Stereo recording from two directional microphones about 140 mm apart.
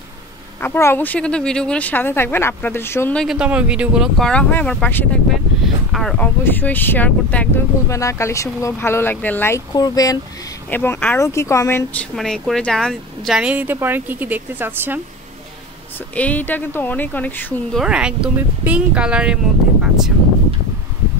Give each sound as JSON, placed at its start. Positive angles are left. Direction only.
{"t": 0.6, "sound": "speech", "side_deg": 15}
{"t": 3.2, "sound": "speech", "side_deg": -5}
{"t": 4.2, "sound": "speech", "side_deg": 10}
{"t": 6.1, "sound": "speech", "side_deg": 10}
{"t": 7.9, "sound": "speech", "side_deg": 20}
{"t": 9.8, "sound": "speech", "side_deg": 25}
{"t": 10.7, "sound": "speech", "side_deg": 15}
{"t": 12.0, "sound": "speech", "side_deg": 0}
{"t": 13.4, "sound": "speech", "side_deg": -10}
{"t": 16.2, "sound": "speech", "side_deg": 10}
{"t": 17.7, "sound": "speech", "side_deg": -5}